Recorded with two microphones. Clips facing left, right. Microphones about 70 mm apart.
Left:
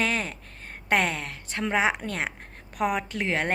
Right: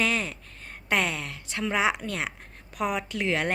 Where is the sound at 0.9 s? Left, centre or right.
Left.